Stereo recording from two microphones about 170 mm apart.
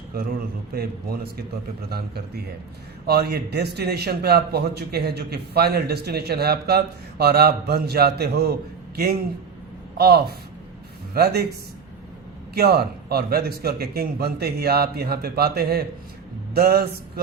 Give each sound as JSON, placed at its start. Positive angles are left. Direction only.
{"t": 0.1, "sound": "a man's voice", "side_deg": -60}
{"t": 12.5, "sound": "a man's voice", "side_deg": -65}